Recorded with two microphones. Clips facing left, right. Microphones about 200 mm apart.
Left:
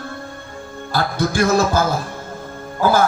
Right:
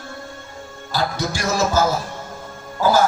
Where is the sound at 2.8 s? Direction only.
55° left (ahead or behind).